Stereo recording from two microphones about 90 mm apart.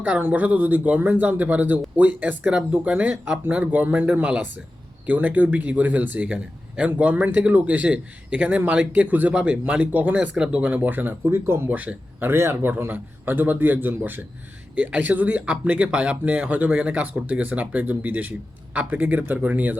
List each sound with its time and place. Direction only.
0.0 s a man's voice: 20° right (ahead or behind)